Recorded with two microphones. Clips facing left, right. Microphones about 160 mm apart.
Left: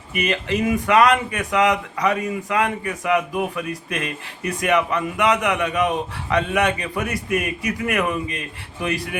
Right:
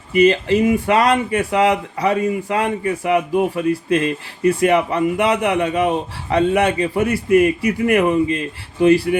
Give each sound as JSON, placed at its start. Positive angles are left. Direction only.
{"t": 0.1, "sound": "speech", "side_deg": -30}